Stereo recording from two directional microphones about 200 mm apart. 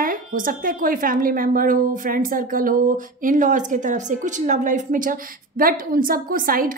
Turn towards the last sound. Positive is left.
turn(degrees=-45)  # may be behind; listen again after turning